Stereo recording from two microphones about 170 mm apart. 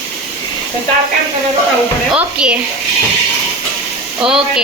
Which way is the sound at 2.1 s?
5° right (ahead or behind).